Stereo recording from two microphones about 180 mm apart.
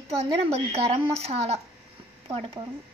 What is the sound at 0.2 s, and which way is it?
A woman's voice, 35° right (ahead or behind).